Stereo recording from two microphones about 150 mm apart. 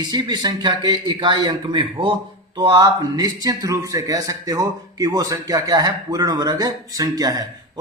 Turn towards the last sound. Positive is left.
turn(degrees=-25)  # may be behind; listen again after turning